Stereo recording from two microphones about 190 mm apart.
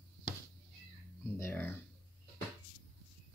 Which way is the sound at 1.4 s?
10° left (ahead or behind).